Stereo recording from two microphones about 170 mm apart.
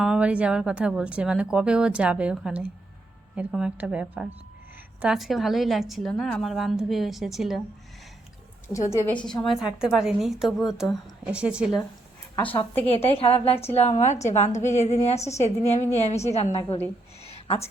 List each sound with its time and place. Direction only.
0.0 s speech: 5° right (ahead or behind)
8.6 s a woman's voice: 15° left (ahead or behind)
9.2 s speech: 5° left (ahead or behind)
12.9 s a woman's voice: 35° left (ahead or behind)
17.2 s a sound: 35° left (ahead or behind)